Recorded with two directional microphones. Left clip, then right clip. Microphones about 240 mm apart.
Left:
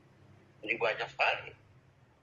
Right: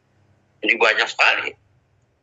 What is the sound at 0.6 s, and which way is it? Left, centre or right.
Speech, right.